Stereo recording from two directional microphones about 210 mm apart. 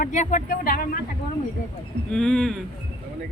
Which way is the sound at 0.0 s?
35° left (ahead or behind).